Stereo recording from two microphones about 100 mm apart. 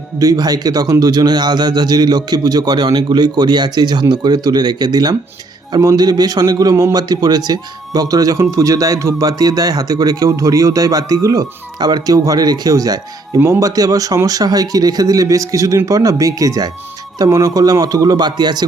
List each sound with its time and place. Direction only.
0.2 s a man's voice: 40° right (ahead or behind)